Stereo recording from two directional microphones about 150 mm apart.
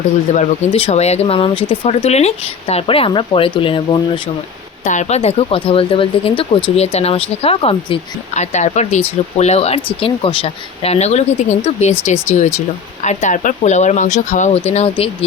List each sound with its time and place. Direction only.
0.3 s speech: 45° left (ahead or behind)
4.8 s speech: 55° left (ahead or behind); by 8.0 s 35° left (ahead or behind)
8.4 s speech: 50° left (ahead or behind)